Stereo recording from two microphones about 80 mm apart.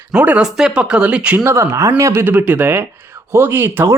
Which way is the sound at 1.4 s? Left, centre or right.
Right.